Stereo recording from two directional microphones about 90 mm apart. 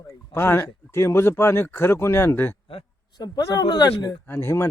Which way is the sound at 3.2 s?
50° left (ahead or behind).